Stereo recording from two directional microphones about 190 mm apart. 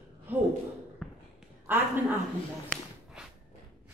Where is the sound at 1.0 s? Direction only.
Centre (ahead or behind).